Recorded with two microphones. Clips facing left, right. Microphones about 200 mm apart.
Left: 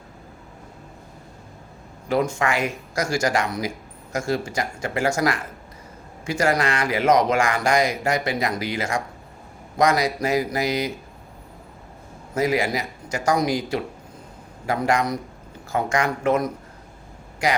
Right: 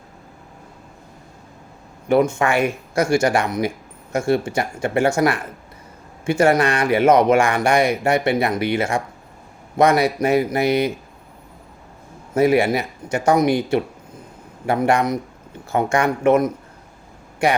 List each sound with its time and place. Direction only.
2.0 s speech: 25° right (ahead or behind)
12.3 s speech: 30° right (ahead or behind)